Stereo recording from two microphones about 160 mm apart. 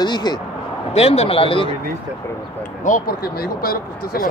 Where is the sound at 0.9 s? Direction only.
40° left (ahead or behind).